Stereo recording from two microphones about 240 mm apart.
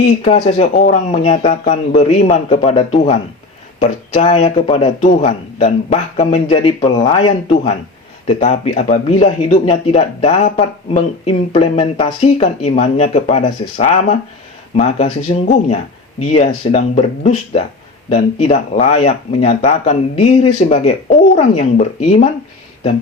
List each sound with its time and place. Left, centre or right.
0.0 s speech: left